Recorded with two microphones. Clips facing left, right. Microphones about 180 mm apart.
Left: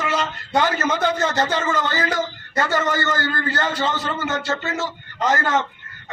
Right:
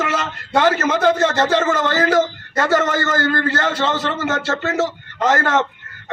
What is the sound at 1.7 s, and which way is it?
Speech, 85° right.